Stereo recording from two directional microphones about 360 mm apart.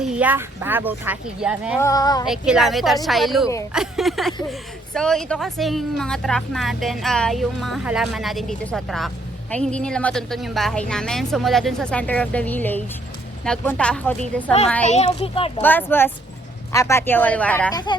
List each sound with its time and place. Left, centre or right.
0.0 s speech: centre
1.8 s a child's voice: centre
2.2 s speech: centre
14.8 s a child's voice: centre
15.6 s speech: centre